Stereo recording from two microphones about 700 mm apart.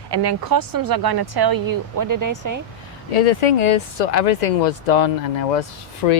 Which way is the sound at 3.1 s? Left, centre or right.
Left.